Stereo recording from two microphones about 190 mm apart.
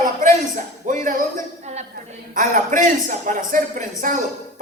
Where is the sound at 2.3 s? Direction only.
45° right (ahead or behind).